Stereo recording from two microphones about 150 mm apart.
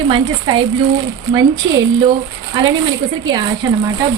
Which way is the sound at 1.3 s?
25° right (ahead or behind).